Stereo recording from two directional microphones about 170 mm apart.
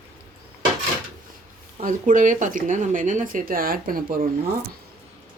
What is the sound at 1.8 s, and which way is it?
Speech, 50° right (ahead or behind).